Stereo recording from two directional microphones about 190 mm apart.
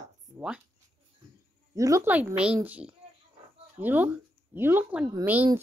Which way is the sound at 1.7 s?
15° right (ahead or behind).